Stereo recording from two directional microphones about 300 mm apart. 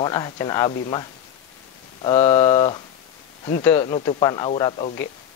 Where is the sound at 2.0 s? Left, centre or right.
Centre.